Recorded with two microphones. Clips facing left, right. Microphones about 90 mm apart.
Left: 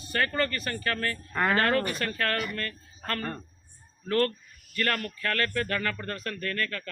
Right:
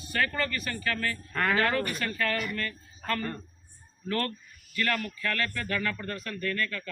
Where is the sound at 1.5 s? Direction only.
40° left (ahead or behind).